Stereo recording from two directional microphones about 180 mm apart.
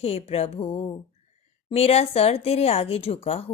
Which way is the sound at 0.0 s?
35° left (ahead or behind).